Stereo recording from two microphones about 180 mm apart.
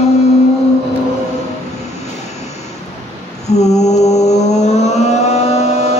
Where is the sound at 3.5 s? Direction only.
40° left (ahead or behind).